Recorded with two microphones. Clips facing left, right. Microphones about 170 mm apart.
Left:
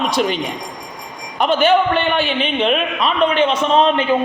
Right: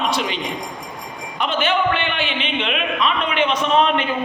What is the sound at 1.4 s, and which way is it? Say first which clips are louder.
A man's voice: left 6 dB; 40° left (ahead or behind).